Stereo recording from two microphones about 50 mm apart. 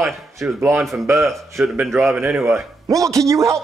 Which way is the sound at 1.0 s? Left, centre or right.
Right.